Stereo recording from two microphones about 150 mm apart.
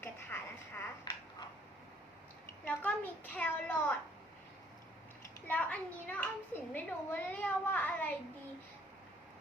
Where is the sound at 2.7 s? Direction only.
10° left (ahead or behind).